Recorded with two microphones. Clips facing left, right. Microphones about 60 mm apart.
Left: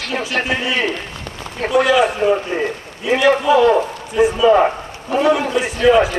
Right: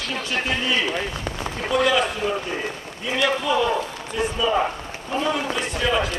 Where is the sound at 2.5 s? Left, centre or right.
Left.